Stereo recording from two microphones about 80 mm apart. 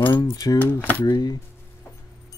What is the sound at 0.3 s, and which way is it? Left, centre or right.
Speech, left.